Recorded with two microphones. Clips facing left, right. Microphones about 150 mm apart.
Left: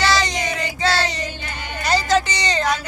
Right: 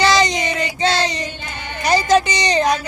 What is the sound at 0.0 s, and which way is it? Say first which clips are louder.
Child singing: right 4 dB; 20° right (ahead or behind).